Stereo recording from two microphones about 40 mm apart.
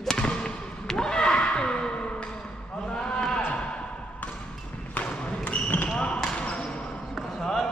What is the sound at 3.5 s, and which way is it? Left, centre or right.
Music, left.